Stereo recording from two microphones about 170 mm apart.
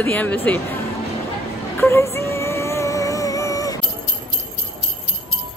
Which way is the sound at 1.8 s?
15° left (ahead or behind).